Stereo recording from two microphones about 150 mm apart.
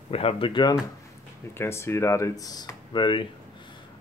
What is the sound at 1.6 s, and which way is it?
Speech, 15° left (ahead or behind).